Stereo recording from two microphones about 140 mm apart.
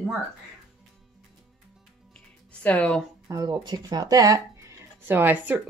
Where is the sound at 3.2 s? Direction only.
25° right (ahead or behind).